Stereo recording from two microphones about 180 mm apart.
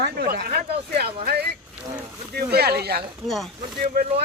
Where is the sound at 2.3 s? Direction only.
60° right (ahead or behind).